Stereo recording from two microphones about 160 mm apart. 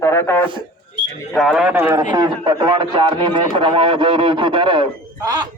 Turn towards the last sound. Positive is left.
turn(degrees=-25)  # may be behind; listen again after turning